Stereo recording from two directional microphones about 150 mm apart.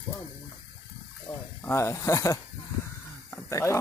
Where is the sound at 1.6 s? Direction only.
20° left (ahead or behind).